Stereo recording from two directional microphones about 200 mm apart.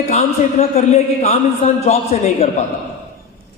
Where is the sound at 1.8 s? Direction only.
30° left (ahead or behind).